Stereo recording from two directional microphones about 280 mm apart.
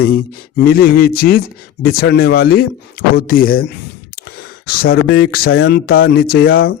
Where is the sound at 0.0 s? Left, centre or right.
Left.